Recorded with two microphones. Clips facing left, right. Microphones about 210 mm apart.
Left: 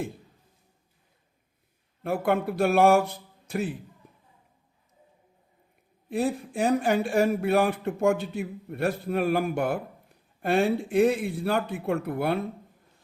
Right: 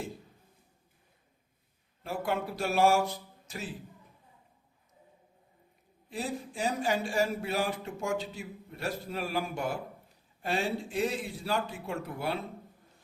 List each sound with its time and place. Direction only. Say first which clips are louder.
2.0 s speech: left 7 dB; 55° left (ahead or behind)
6.1 s speech: left 9 dB; 60° left (ahead or behind)